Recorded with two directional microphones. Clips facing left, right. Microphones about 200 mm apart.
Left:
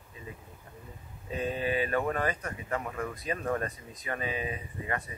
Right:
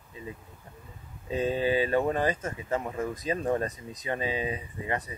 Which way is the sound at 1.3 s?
25° right (ahead or behind).